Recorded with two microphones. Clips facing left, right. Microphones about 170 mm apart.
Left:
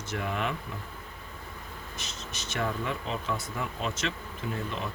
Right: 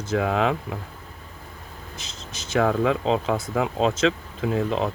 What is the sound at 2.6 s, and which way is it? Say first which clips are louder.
Speech: right 11 dB; 90° right.